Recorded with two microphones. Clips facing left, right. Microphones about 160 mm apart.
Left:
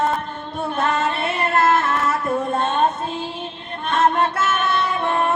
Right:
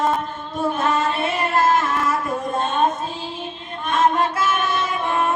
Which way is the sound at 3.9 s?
65° left (ahead or behind).